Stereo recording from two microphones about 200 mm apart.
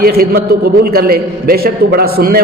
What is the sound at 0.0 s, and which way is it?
A man's voice, 50° right (ahead or behind).